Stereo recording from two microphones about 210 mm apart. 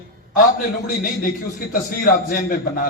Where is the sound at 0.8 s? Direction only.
45° left (ahead or behind).